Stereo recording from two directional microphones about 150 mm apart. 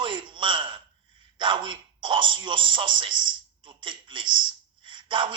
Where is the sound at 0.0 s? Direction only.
30° right (ahead or behind).